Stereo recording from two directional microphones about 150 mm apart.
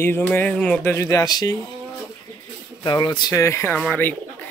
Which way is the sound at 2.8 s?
30° left (ahead or behind).